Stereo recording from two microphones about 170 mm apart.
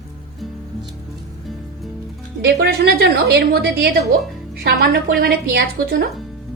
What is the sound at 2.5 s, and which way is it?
A woman's voice, 75° right (ahead or behind).